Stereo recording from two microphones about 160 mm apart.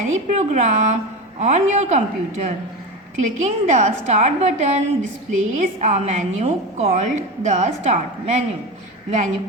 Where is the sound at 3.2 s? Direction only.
50° right (ahead or behind).